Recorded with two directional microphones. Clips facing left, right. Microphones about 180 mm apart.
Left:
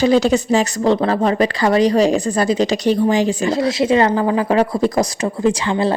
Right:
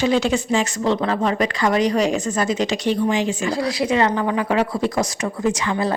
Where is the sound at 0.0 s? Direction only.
40° left (ahead or behind).